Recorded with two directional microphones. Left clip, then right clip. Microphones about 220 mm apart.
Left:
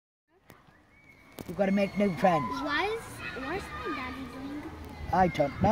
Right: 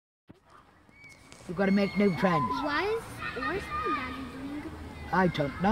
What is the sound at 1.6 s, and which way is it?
Speech, 30° right (ahead or behind).